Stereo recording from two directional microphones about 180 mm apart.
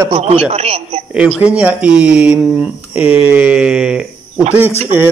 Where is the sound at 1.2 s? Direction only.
5° right (ahead or behind).